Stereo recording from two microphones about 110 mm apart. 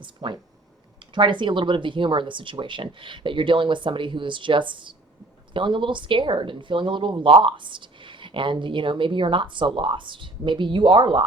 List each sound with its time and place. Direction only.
0.0 s a woman's voice: 45° right (ahead or behind)